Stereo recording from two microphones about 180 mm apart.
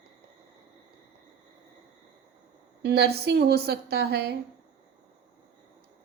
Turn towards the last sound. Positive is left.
turn(degrees=-65)  # may be behind; listen again after turning